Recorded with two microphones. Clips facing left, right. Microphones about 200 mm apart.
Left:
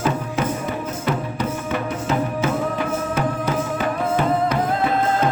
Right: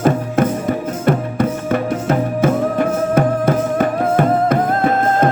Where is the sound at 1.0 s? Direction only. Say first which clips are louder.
Right 8 dB; 50° right (ahead or behind).